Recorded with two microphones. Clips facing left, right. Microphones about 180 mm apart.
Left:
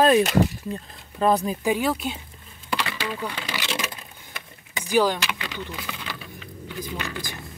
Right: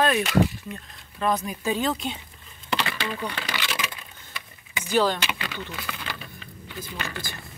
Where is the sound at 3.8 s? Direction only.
40° left (ahead or behind).